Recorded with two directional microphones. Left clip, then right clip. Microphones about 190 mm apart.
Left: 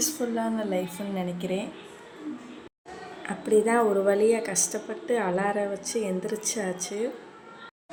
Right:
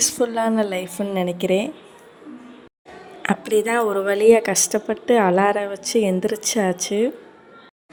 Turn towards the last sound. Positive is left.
turn(degrees=-50)  # may be behind; listen again after turning